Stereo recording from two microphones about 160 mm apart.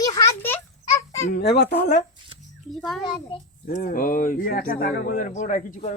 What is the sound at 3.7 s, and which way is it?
Speech, 60° left (ahead or behind).